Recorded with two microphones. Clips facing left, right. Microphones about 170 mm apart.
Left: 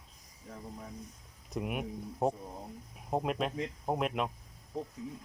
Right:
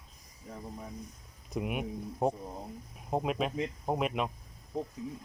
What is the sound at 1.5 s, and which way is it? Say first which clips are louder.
Speech: right 2 dB; centre (ahead or behind).